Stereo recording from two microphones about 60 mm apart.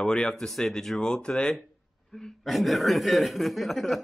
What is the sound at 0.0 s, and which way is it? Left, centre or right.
Speech, centre.